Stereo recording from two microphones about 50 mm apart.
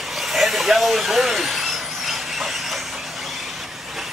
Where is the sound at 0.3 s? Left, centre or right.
Centre.